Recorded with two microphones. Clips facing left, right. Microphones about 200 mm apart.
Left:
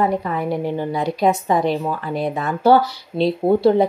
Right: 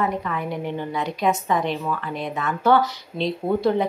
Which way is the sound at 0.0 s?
35° left (ahead or behind).